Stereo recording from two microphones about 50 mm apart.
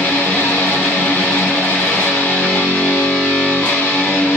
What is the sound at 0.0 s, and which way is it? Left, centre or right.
Music, left.